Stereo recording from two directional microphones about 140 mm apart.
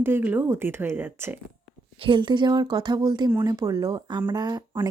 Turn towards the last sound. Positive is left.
turn(degrees=-30)  # may be behind; listen again after turning